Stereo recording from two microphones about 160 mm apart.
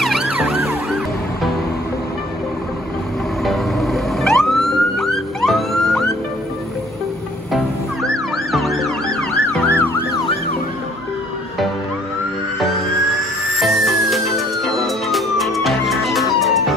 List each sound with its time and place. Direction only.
0.0 s emergency vehicle: 5° right (ahead or behind)
3.4 s emergency vehicle: centre (ahead or behind)
7.5 s emergency vehicle: centre (ahead or behind)
13.6 s music: centre (ahead or behind)